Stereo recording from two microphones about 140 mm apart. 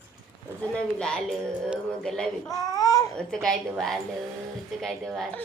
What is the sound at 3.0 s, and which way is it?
A woman's voice, 5° left (ahead or behind).